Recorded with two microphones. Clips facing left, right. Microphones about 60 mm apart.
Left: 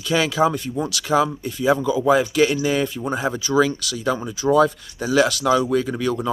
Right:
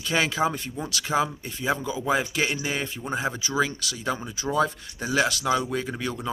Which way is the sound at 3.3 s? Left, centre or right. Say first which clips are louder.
Left 5 dB; centre.